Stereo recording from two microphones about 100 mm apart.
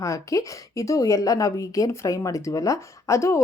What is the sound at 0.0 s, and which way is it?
A woman's voice, 35° left (ahead or behind).